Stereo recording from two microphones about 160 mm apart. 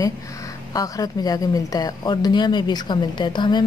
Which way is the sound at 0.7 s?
20° left (ahead or behind).